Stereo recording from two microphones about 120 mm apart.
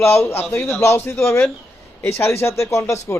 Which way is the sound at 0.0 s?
20° left (ahead or behind).